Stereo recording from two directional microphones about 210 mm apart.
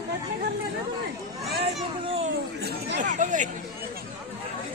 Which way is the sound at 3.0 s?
35° right (ahead or behind).